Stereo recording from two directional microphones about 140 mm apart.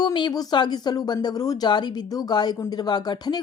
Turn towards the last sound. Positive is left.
turn(degrees=30)  # may be behind; listen again after turning